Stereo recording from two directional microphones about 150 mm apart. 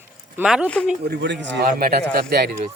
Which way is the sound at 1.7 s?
75° right (ahead or behind).